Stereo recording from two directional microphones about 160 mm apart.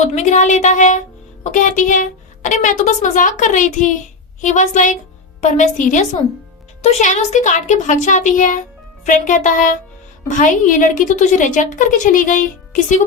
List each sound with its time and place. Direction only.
0.1 s a woman's voice: 50° left (ahead or behind)